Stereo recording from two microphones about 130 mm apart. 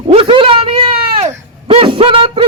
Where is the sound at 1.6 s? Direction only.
45° right (ahead or behind).